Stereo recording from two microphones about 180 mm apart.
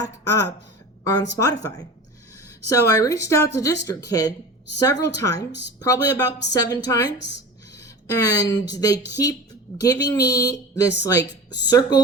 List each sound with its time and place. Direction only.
0.0 s speech: 20° left (ahead or behind)
5.5 s a woman's voice: 70° left (ahead or behind)
5.8 s speech: 20° left (ahead or behind)
7.7 s a sound: 20° left (ahead or behind)
8.4 s speech: 20° left (ahead or behind)